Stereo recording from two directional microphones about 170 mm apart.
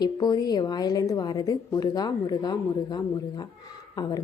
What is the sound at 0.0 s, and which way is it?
A woman's voice, 25° left (ahead or behind).